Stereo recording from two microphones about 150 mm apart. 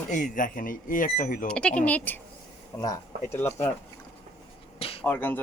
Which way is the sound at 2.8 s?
25° left (ahead or behind).